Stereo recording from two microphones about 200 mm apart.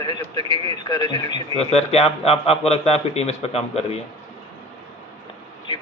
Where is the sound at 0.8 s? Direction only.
20° left (ahead or behind).